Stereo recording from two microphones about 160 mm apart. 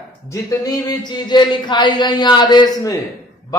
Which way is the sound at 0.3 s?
20° left (ahead or behind).